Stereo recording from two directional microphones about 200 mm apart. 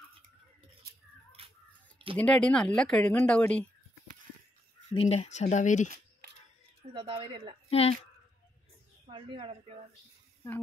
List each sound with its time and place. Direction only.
1.4 s scissors: 30° right (ahead or behind)
2.1 s speech: 5° left (ahead or behind)
4.9 s speech: 30° left (ahead or behind)
6.9 s a woman's voice: 25° right (ahead or behind)
7.7 s speech: 30° left (ahead or behind)
9.1 s a woman's voice: 25° right (ahead or behind)